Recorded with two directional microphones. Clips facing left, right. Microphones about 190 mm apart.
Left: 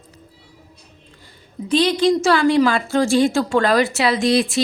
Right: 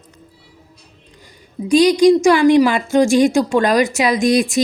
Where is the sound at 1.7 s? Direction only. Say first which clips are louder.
Right 6 dB; 15° right (ahead or behind).